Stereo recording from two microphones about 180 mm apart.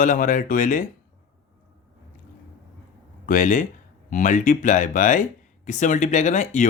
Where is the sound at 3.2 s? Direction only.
45° left (ahead or behind).